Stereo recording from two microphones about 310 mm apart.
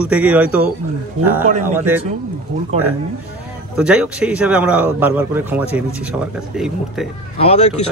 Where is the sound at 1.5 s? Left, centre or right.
Right.